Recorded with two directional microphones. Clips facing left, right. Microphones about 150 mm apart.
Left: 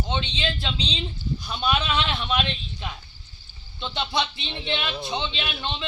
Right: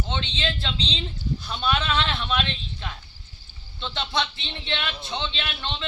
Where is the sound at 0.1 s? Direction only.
10° left (ahead or behind).